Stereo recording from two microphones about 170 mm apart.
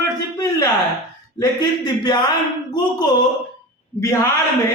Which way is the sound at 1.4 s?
25° left (ahead or behind).